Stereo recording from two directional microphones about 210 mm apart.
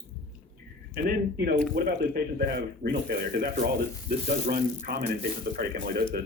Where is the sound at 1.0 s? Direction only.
45° right (ahead or behind).